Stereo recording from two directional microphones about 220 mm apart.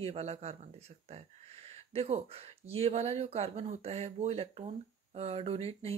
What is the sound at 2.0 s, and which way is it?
Speech, 25° right (ahead or behind).